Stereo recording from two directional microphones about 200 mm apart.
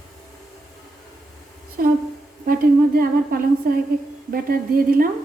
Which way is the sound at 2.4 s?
50° right (ahead or behind).